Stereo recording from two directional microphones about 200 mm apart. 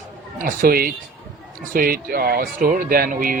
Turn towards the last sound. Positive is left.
turn(degrees=-45)  # may be behind; listen again after turning